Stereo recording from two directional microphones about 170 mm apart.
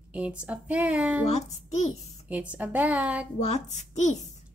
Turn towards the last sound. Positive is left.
turn(degrees=45)  # may be behind; listen again after turning